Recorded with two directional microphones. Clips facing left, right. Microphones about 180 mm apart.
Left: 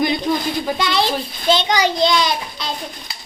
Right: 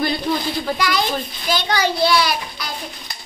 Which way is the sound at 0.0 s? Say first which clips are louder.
Left 2 dB; 15° left (ahead or behind).